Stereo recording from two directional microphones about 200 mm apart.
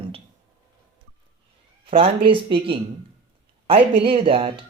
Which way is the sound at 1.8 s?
25° right (ahead or behind).